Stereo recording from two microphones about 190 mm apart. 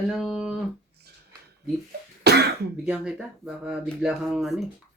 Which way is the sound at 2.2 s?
60° right (ahead or behind).